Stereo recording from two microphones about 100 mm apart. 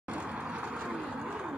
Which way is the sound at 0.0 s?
10° right (ahead or behind).